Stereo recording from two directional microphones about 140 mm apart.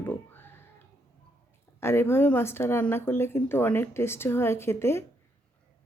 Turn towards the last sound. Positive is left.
turn(degrees=20)  # may be behind; listen again after turning